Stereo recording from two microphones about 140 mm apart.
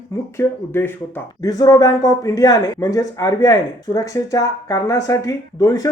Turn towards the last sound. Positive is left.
turn(degrees=25)  # may be behind; listen again after turning